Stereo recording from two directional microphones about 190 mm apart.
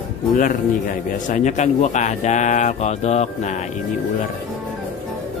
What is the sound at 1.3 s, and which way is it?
A man's voice, 40° left (ahead or behind).